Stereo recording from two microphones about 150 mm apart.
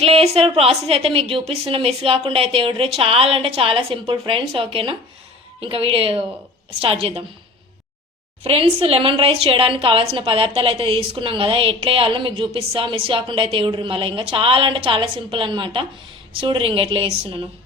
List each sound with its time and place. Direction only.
0.0 s a woman's voice: 40° right (ahead or behind)
8.4 s a woman's voice: 40° right (ahead or behind)